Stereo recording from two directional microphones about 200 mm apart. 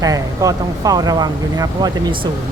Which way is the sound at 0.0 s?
15° right (ahead or behind).